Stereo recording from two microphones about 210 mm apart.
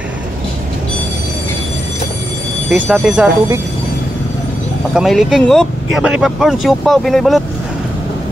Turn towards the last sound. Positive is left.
turn(degrees=0)  # may be behind; listen again after turning